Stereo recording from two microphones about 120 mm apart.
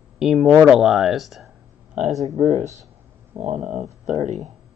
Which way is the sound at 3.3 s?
80° right.